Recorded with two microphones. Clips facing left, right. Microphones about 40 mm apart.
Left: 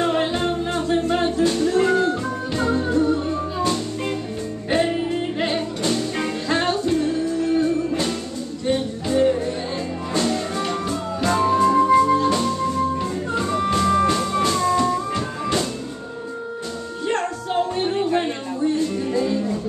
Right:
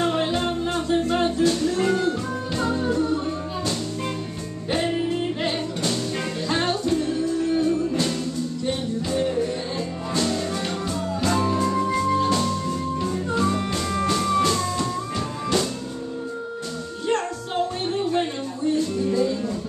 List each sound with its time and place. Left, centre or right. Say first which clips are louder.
0.0 s music: left 2 dB; centre
4.6 s music: left 3 dB; centre
13.3 s music: left 3 dB; centre
17.1 s music: left 2 dB; centre